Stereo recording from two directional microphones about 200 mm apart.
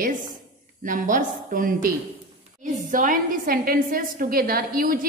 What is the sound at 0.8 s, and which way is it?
A woman's voice, 40° right (ahead or behind).